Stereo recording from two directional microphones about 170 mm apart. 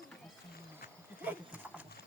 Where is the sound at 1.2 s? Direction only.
10° right (ahead or behind).